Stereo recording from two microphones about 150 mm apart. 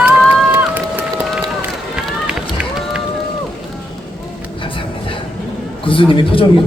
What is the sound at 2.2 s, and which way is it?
Run, 5° right (ahead or behind).